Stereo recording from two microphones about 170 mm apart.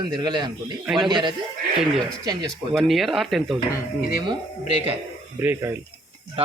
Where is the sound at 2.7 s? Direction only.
Centre (ahead or behind).